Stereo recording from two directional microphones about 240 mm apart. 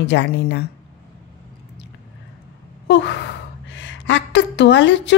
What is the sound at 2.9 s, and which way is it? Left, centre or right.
Speech, left.